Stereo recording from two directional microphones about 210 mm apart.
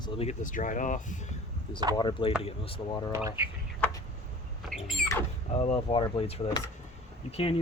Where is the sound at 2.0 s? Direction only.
20° left (ahead or behind).